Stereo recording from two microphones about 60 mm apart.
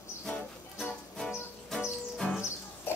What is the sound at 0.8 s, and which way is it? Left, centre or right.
Music, centre.